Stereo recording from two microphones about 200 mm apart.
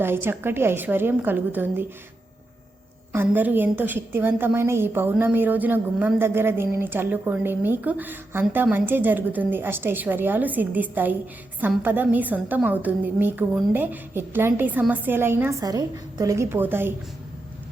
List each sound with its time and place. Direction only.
0.0 s a woman's voice: 10° right (ahead or behind)
3.1 s a woman's voice: 10° right (ahead or behind)